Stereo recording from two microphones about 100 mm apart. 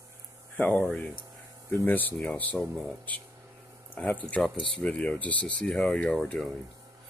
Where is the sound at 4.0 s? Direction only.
10° left (ahead or behind).